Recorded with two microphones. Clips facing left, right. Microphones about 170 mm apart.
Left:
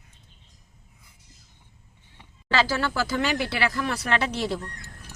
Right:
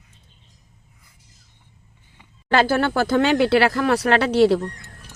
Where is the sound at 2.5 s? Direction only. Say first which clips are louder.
Right 6 dB; 55° right (ahead or behind).